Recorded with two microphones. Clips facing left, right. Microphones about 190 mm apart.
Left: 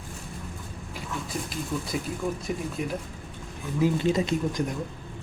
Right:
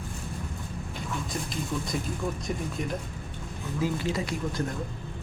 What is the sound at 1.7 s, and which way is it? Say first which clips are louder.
Speech: left 2 dB; 5° left (ahead or behind).